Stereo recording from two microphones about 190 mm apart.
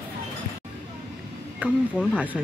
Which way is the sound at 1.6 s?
10° right (ahead or behind).